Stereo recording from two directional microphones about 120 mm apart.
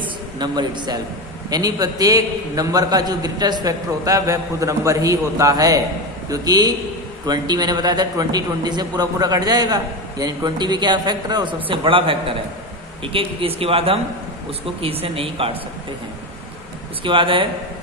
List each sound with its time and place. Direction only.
0.0 s a sound: 40° right (ahead or behind)
1.5 s a man's voice: 30° right (ahead or behind); by 15.5 s 50° right (ahead or behind)
17.0 s speech: 45° right (ahead or behind)